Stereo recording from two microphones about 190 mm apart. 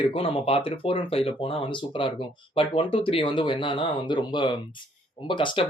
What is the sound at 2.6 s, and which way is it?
Speech, 30° left (ahead or behind).